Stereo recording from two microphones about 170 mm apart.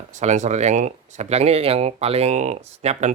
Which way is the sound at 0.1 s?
45° right (ahead or behind).